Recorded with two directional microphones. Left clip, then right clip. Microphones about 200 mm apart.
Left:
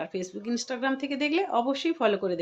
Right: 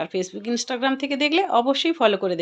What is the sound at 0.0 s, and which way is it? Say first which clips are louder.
Speech: right 7 dB; 20° right (ahead or behind).